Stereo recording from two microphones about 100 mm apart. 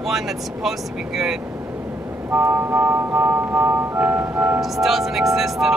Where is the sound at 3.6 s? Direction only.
20° right (ahead or behind).